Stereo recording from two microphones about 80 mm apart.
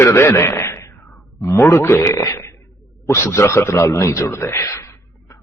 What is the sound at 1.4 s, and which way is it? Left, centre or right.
A man's voice, left.